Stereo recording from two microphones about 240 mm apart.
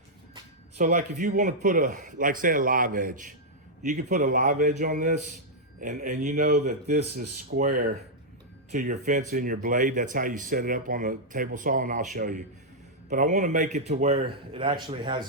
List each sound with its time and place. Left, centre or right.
0.8 s a man's voice: right